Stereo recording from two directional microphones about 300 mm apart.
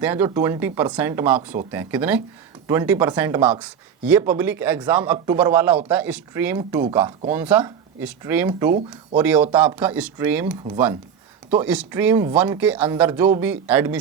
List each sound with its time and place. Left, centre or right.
0.0 s a man's voice: centre